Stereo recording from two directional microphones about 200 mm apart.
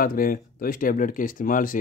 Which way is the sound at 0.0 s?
45° left (ahead or behind).